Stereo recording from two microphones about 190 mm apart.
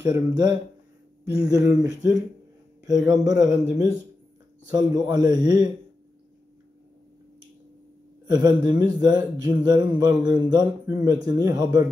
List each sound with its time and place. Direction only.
0.3 s a man's voice: 20° right (ahead or behind)
8.3 s a man's voice: 20° right (ahead or behind)